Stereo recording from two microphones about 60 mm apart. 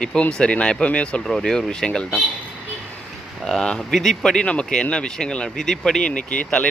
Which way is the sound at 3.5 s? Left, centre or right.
Centre.